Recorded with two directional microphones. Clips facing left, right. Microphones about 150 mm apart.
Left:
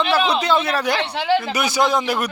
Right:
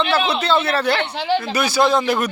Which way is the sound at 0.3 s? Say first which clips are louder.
Right 1 dB; 15° left (ahead or behind).